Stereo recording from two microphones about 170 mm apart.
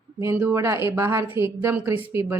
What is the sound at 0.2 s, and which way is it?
Speech, 15° right (ahead or behind).